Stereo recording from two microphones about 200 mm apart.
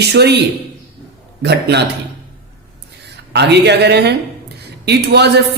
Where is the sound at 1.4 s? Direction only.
55° right (ahead or behind).